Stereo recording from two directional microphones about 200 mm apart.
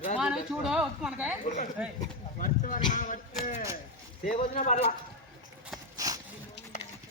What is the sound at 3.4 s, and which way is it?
Speech, 40° left (ahead or behind).